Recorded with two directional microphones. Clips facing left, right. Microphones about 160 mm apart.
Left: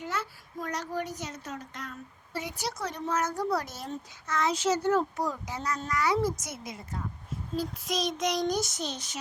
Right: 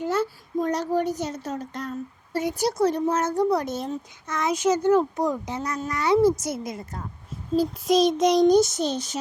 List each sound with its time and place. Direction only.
0.0 s a child's voice: 30° right (ahead or behind)